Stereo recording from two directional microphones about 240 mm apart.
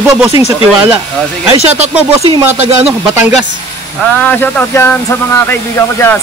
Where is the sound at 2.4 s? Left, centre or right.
Centre.